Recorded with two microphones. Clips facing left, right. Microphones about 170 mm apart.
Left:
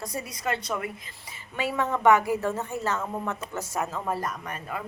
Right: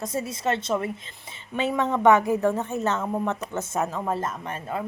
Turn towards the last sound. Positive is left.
turn(degrees=-25)  # may be behind; listen again after turning